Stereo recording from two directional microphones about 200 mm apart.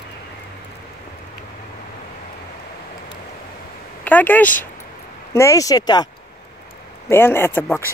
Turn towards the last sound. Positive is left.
turn(degrees=10)  # may be behind; listen again after turning